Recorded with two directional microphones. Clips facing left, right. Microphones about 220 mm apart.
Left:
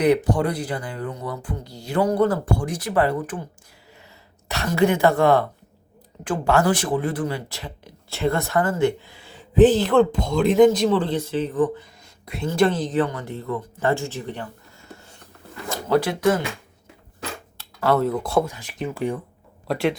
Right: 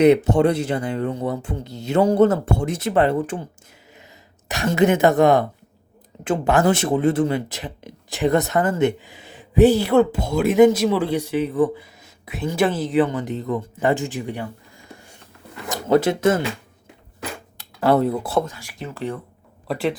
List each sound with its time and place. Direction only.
0.0 s speech: 25° right (ahead or behind)
4.4 s speech: 15° right (ahead or behind)
17.6 s a sound: 15° right (ahead or behind)
18.0 s speech: 10° right (ahead or behind)
18.4 s speech: 20° left (ahead or behind)
19.6 s speech: centre (ahead or behind)